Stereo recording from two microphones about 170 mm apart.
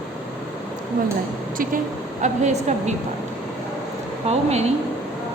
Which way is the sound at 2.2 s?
45° right (ahead or behind).